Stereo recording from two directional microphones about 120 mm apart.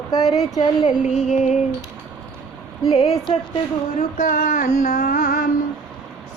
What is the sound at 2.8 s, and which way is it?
Speech, 60° left (ahead or behind).